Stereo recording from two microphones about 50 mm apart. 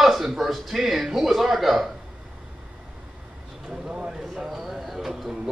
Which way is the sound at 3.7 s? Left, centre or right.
Centre.